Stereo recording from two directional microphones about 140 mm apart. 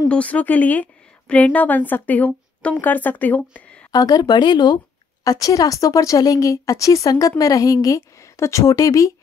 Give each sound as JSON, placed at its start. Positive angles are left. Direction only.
{"t": 0.1, "sound": "a woman's voice", "side_deg": 10}
{"t": 3.9, "sound": "speech", "side_deg": 30}